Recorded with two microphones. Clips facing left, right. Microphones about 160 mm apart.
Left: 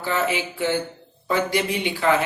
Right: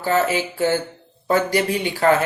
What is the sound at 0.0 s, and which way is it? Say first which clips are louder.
Music: right 4 dB; 40° right (ahead or behind).